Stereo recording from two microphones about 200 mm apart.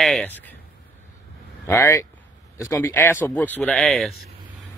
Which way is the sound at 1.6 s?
15° left (ahead or behind).